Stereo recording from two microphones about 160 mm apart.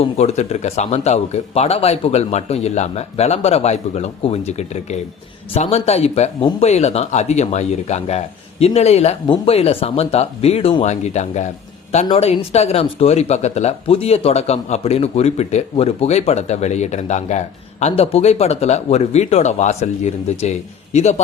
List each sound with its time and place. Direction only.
0.0 s speech: 40° left (ahead or behind)